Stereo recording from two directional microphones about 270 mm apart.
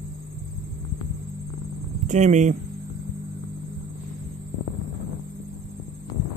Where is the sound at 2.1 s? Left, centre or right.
Right.